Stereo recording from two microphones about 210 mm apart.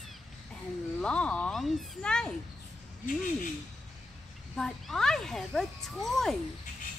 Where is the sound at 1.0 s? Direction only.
5° left (ahead or behind).